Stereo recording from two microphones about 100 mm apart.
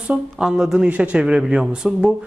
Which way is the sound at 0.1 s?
5° right (ahead or behind).